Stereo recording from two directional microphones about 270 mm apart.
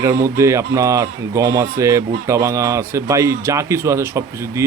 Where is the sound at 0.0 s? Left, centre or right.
Centre.